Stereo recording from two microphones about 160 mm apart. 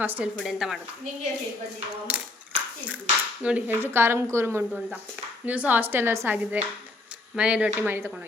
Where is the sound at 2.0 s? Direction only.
10° right (ahead or behind).